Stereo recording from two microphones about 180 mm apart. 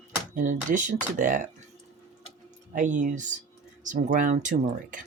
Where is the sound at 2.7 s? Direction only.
45° right (ahead or behind).